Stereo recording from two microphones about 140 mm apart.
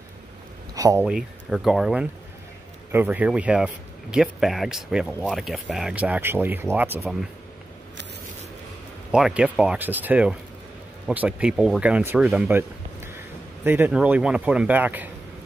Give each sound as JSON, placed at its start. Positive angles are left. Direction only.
{"t": 0.7, "sound": "speech", "side_deg": -25}
{"t": 1.0, "sound": "speech", "side_deg": -5}
{"t": 9.1, "sound": "speech", "side_deg": -5}
{"t": 12.4, "sound": "a sound", "side_deg": -15}
{"t": 13.7, "sound": "speech", "side_deg": -15}